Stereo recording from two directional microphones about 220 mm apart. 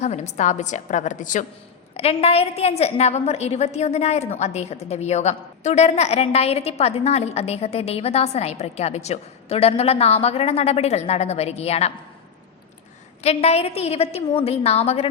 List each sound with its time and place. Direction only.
0.0 s a woman's voice: 30° left (ahead or behind)
13.2 s a woman's voice: 30° left (ahead or behind)